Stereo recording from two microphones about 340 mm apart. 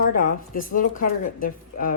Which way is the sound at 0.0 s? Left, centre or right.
Left.